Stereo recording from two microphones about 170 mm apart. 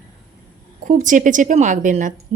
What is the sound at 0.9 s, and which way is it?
Speech, 50° right (ahead or behind).